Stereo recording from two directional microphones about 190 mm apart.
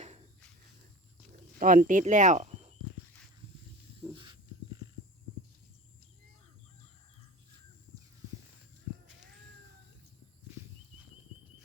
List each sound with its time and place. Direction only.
1.5 s speech: 45° right (ahead or behind)
4.1 s dog: 25° right (ahead or behind)